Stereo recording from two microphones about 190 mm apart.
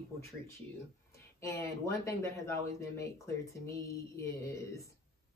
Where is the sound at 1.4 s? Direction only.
15° left (ahead or behind).